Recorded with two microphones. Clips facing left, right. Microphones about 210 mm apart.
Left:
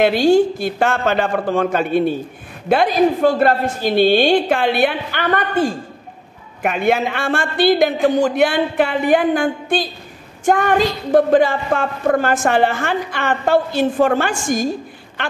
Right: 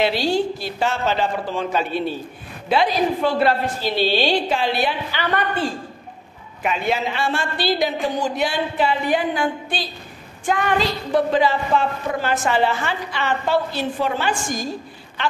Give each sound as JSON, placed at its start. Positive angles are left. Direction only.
{"t": 0.0, "sound": "a woman's voice", "side_deg": 50}